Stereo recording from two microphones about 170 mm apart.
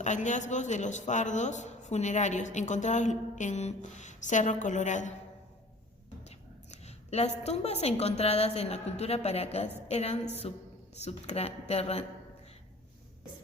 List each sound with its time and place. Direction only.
0.0 s speech: 45° left (ahead or behind)
6.2 s a woman's voice: 40° left (ahead or behind)